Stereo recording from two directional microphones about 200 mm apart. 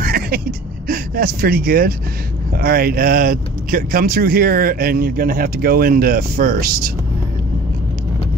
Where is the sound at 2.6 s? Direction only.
50° right (ahead or behind).